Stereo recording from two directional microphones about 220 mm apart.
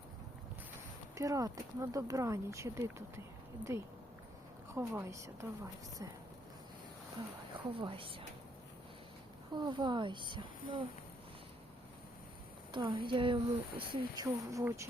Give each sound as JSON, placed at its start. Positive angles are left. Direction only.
{"t": 1.1, "sound": "speech", "side_deg": -15}
{"t": 7.7, "sound": "speech", "side_deg": -25}
{"t": 9.6, "sound": "speech", "side_deg": -20}
{"t": 12.7, "sound": "speech", "side_deg": -20}